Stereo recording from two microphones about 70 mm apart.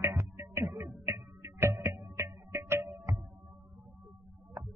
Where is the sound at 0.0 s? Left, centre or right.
Right.